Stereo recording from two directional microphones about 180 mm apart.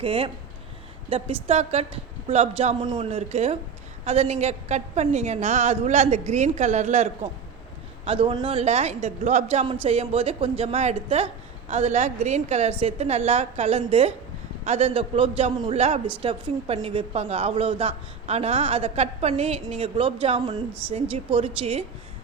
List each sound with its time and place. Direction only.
0.0 s a woman's voice: 30° right (ahead or behind)